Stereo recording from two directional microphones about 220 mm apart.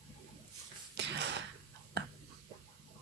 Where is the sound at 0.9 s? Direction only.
50° right (ahead or behind).